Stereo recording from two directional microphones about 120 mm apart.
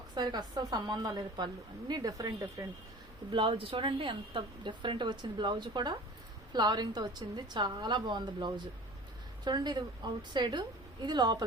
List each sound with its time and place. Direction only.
0.1 s a woman's voice: 35° right (ahead or behind)
3.3 s a woman's voice: 45° right (ahead or behind)